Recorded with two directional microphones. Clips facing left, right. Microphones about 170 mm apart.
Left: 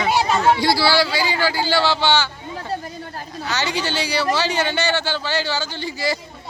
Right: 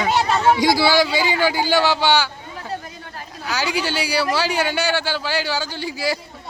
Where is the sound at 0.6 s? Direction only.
15° right (ahead or behind).